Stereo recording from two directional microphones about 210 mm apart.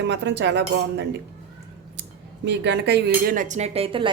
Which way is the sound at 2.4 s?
55° right (ahead or behind).